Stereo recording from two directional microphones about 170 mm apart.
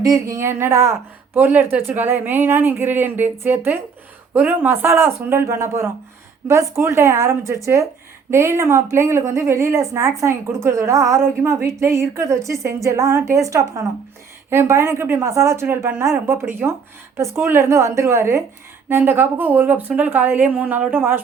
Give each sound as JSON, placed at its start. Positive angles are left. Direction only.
{"t": 0.0, "sound": "a woman's voice", "side_deg": -20}